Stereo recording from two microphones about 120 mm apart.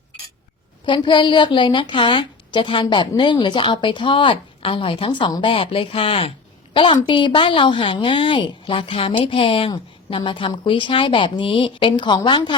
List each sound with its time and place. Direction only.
0.9 s a woman's voice: 45° left (ahead or behind)